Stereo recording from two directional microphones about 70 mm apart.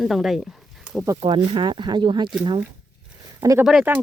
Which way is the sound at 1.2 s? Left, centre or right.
Right.